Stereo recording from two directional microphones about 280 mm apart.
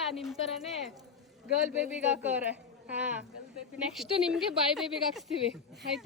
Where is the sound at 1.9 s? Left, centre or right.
Centre.